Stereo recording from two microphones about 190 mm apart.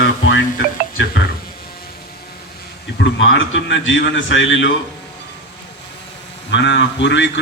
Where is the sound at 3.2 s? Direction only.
75° left (ahead or behind).